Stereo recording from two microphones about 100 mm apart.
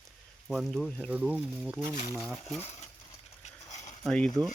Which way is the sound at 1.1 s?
10° right (ahead or behind).